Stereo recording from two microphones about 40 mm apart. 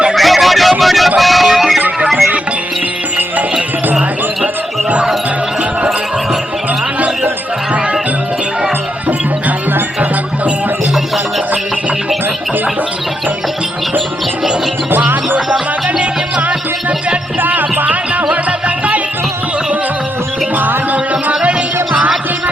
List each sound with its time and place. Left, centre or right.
0.1 s a sound: centre
1.2 s music: centre
17.4 s music: right
20.6 s music: right